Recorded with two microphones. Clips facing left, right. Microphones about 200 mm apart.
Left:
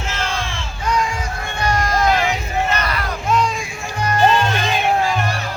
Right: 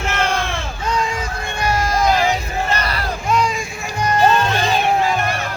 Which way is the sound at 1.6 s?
5° right (ahead or behind).